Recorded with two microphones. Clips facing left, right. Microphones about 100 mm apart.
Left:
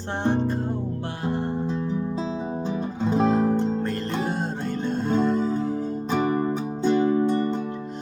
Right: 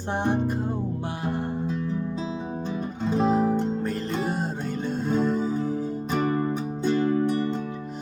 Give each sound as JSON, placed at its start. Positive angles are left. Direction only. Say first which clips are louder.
{"t": 0.3, "sound": "music", "louder": "left 3 dB", "side_deg": -10}
{"t": 3.0, "sound": "music", "louder": "left 1 dB", "side_deg": 0}
{"t": 6.1, "sound": "music", "louder": "left 2 dB", "side_deg": 5}